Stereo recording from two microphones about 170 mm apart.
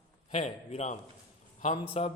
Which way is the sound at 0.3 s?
40° left (ahead or behind).